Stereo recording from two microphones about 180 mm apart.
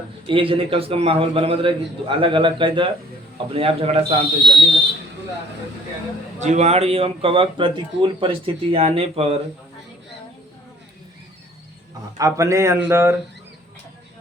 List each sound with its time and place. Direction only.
0.3 s a man's voice: 30° right (ahead or behind)
6.4 s speech: 40° right (ahead or behind)
12.1 s speech: 15° right (ahead or behind)